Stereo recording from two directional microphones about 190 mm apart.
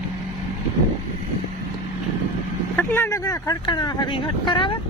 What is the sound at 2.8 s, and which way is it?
Speech, 10° left (ahead or behind).